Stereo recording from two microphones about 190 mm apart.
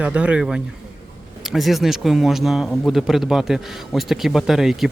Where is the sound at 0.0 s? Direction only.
5° right (ahead or behind).